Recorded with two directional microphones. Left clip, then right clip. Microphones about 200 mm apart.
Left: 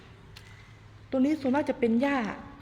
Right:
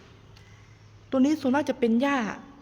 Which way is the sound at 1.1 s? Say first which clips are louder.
Right 3 dB; 25° right (ahead or behind).